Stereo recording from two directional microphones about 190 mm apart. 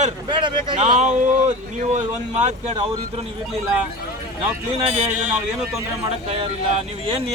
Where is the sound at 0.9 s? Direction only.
35° right (ahead or behind).